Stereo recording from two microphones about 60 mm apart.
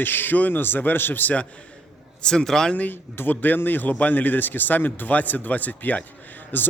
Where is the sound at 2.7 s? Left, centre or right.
Left.